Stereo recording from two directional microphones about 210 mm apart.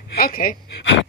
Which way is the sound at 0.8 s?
60° left (ahead or behind).